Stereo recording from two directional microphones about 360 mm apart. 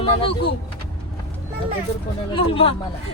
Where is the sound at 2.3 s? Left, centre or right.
Centre.